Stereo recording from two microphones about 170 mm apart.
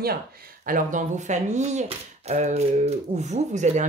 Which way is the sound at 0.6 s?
50° right (ahead or behind).